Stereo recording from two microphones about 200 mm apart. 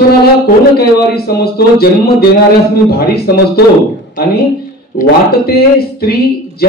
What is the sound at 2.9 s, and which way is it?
Speech, 50° left (ahead or behind).